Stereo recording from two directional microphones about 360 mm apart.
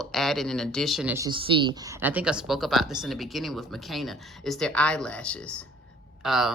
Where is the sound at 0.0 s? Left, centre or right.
Centre.